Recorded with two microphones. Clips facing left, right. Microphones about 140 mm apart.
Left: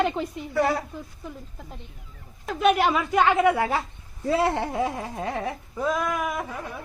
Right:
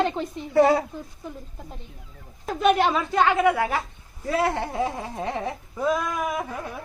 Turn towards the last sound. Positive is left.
turn(degrees=0)  # may be behind; listen again after turning